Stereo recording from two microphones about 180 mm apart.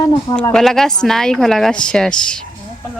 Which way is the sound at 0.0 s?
25° left (ahead or behind).